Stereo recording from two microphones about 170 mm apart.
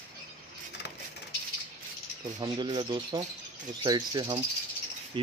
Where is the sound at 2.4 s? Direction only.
25° right (ahead or behind).